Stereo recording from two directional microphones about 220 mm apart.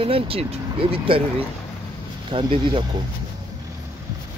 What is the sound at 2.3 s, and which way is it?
Speech, 25° right (ahead or behind).